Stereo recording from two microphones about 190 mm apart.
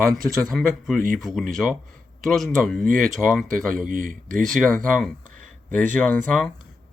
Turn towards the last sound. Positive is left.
turn(degrees=5)  # may be behind; listen again after turning